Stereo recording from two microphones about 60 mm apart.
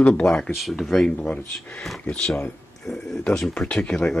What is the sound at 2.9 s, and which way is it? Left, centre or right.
Speech, centre.